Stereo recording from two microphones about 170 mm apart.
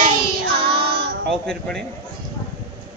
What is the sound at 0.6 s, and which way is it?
Child singing, 70° right (ahead or behind).